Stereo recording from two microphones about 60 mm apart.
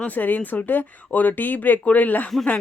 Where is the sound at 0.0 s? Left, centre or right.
Left.